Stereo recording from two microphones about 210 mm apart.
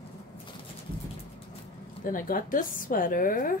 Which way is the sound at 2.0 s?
40° left (ahead or behind).